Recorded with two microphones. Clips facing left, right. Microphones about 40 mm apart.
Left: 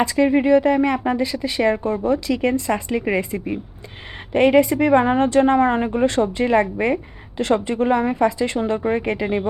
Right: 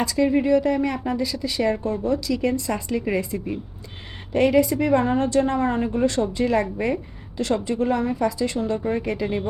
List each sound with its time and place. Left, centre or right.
0.0 s speech: left